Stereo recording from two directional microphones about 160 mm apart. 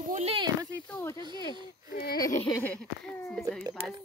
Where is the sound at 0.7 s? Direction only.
10° left (ahead or behind).